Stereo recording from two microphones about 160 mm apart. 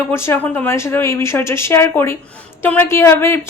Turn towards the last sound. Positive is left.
turn(degrees=15)  # may be behind; listen again after turning